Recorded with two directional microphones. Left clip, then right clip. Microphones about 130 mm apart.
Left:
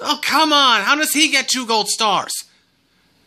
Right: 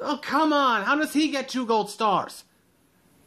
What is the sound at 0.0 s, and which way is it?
Speech, 15° left (ahead or behind).